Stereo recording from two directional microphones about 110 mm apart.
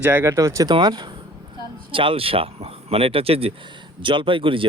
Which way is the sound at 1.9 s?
55° right (ahead or behind).